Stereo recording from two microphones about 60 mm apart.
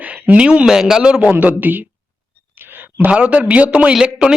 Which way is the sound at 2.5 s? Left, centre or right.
Right.